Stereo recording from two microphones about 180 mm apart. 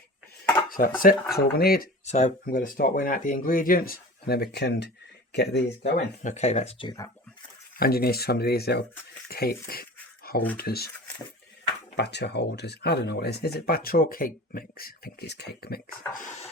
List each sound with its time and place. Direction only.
0.7 s speech: 50° left (ahead or behind)
2.0 s speech: 40° left (ahead or behind); by 6.1 s 65° left (ahead or behind)
6.2 s speech: 40° left (ahead or behind); by 7.1 s 20° left (ahead or behind)
7.8 s speech: 55° left (ahead or behind)
10.3 s a sound: 55° left (ahead or behind)
10.6 s speech: 60° left (ahead or behind)
11.9 s speech: 70° left (ahead or behind)